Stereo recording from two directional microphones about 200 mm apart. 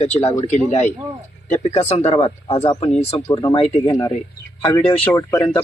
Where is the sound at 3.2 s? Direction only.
20° left (ahead or behind).